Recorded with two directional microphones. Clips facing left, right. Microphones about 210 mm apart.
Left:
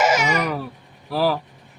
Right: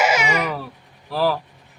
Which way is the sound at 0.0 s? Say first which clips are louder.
Left 1 dB; 10° right (ahead or behind).